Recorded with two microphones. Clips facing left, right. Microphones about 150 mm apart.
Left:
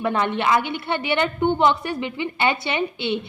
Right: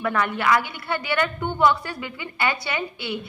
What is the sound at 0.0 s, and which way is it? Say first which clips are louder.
A woman's voice: left 2 dB; 25° left (ahead or behind).